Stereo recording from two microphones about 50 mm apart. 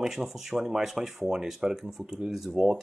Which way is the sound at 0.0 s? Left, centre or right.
Centre.